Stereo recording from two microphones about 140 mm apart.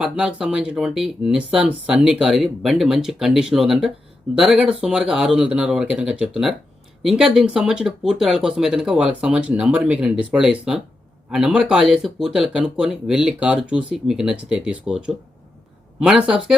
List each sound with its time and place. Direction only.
0.0 s speech: 5° right (ahead or behind)